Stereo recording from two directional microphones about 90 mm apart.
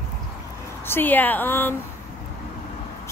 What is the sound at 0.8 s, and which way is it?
Speech, 25° left (ahead or behind).